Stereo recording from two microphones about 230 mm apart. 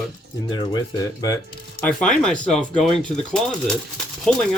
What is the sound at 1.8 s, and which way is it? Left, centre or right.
Speech, centre.